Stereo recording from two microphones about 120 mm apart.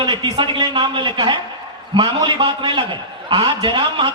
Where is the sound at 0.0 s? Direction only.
40° right (ahead or behind).